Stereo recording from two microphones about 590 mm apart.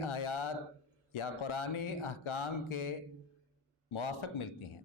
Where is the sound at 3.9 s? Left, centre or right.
Left.